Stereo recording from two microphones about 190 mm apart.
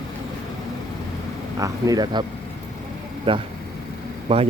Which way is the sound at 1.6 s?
20° right (ahead or behind).